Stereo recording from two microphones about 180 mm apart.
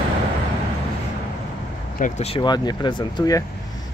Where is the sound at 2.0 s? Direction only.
35° left (ahead or behind).